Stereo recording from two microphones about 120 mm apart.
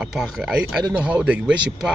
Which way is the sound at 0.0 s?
Centre (ahead or behind).